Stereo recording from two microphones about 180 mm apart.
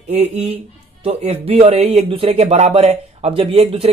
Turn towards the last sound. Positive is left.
turn(degrees=-35)  # may be behind; listen again after turning